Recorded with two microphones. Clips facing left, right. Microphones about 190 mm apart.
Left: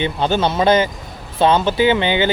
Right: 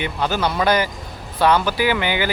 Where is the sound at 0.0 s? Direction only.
25° left (ahead or behind).